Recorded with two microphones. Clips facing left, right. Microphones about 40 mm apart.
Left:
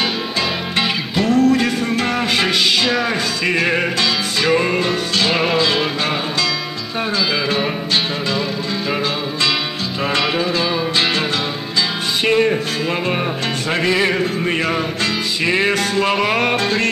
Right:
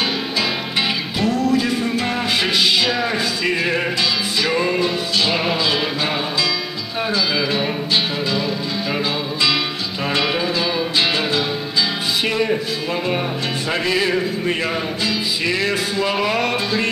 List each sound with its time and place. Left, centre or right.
0.7 s music: left
3.0 s music: centre
4.7 s music: left
5.3 s music: centre
10.2 s music: centre
13.7 s music: left
16.5 s music: left